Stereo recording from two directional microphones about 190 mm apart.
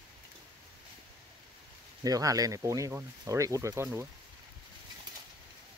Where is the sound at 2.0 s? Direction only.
20° right (ahead or behind).